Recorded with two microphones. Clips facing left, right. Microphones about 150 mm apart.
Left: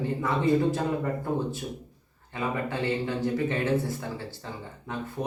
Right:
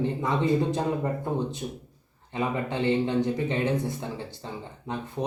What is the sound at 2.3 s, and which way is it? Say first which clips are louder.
Speech: right 2 dB; 20° right (ahead or behind).